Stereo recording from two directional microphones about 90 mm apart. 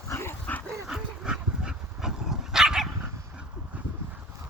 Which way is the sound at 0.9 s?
5° right (ahead or behind).